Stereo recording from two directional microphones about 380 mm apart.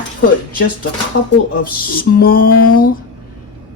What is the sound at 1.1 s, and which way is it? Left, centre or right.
Speech, left.